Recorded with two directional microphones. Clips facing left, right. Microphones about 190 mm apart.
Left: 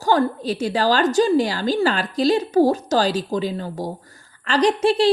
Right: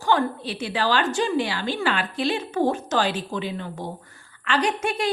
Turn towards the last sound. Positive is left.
turn(degrees=30)  # may be behind; listen again after turning